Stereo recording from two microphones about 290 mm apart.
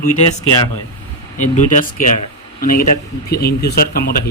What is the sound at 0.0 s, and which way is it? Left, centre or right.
Speech, left.